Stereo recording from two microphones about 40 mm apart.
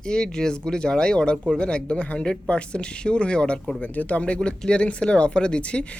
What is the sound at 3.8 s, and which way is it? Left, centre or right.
Speech, left.